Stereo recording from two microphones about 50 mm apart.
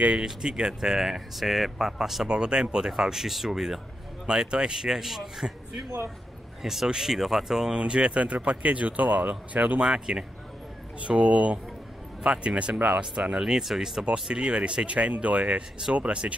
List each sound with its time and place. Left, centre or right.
0.2 s speech: centre
2.2 s speech: centre
7.7 s speech: centre
9.8 s speech: centre